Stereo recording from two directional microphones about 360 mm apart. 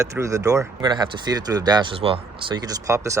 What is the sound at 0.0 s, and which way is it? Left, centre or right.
Speech, centre.